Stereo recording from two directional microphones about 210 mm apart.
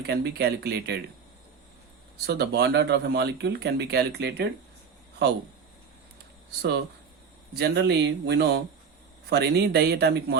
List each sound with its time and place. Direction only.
0.0 s speech: 50° right (ahead or behind)
2.2 s speech: 50° right (ahead or behind)
6.6 s speech: 50° right (ahead or behind)